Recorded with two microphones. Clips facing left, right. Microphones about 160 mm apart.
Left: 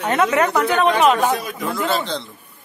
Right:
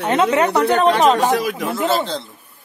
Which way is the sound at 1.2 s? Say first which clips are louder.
Right 3 dB; 80° right.